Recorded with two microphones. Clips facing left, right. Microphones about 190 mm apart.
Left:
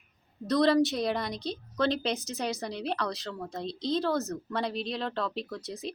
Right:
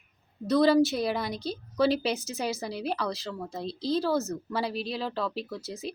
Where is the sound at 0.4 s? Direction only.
5° right (ahead or behind).